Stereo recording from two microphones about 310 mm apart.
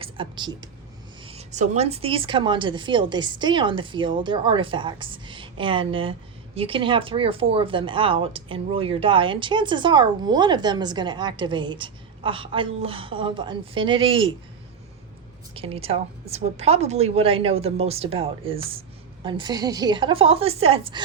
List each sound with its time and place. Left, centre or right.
0.0 s a woman's voice: centre
15.5 s a woman's voice: centre